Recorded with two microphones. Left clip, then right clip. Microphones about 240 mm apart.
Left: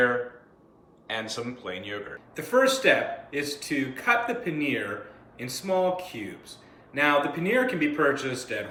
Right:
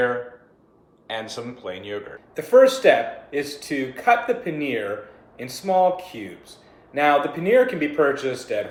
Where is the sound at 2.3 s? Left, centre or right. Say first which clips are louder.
Right 8 dB; centre.